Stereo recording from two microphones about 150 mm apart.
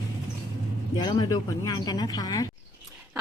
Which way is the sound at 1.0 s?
30° left (ahead or behind).